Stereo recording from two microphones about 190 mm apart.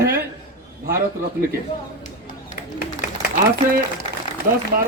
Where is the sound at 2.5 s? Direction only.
50° left (ahead or behind).